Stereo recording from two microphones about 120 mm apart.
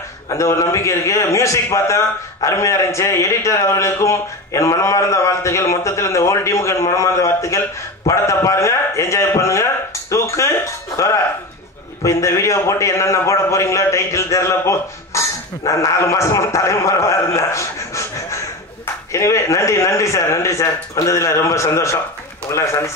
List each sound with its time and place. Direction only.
0.3 s a man's voice: 25° left (ahead or behind)
8.1 s a sound: 25° left (ahead or behind)
12.0 s a man's voice: 25° left (ahead or behind)